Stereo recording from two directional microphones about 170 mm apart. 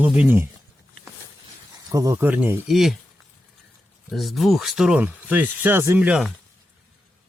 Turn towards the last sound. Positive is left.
turn(degrees=-5)  # may be behind; listen again after turning